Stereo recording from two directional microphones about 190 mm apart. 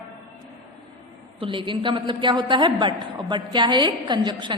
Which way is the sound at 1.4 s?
25° right (ahead or behind).